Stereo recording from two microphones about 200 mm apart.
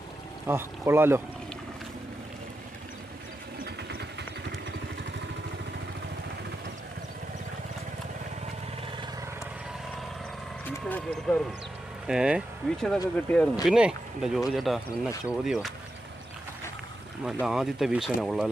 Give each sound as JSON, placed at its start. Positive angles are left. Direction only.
{"t": 0.4, "sound": "speech", "side_deg": -10}
{"t": 3.8, "sound": "vehicle", "side_deg": -55}
{"t": 10.8, "sound": "vehicle", "side_deg": 10}
{"t": 12.0, "sound": "speech", "side_deg": -5}
{"t": 17.4, "sound": "speech", "side_deg": 0}